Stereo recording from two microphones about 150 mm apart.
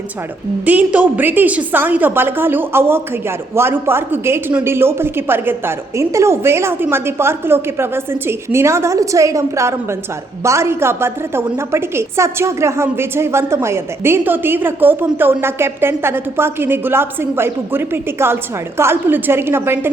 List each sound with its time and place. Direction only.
0.6 s a woman's voice: 10° right (ahead or behind)